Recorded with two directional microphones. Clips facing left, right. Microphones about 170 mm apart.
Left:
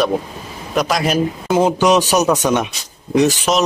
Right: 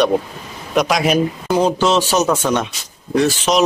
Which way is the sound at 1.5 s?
15° left (ahead or behind).